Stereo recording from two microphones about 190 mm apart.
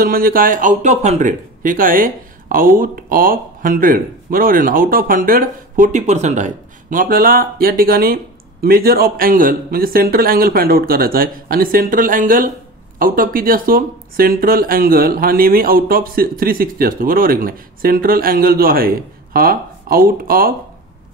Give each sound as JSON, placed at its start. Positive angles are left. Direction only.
{"t": 0.0, "sound": "speech", "side_deg": -50}